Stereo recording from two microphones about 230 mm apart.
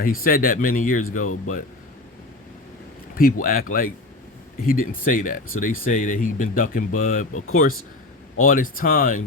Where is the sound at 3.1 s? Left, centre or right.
Left.